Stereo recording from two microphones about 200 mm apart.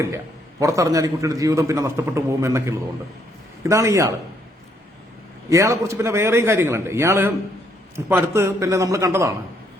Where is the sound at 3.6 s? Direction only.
15° right (ahead or behind).